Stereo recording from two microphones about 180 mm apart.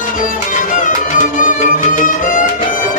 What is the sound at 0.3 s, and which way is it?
Music, 45° left (ahead or behind).